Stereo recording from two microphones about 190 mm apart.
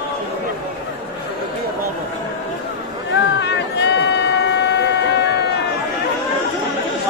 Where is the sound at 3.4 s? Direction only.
65° left (ahead or behind).